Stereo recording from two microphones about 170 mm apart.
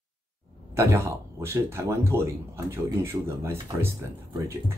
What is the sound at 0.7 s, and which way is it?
Speech, 15° right (ahead or behind).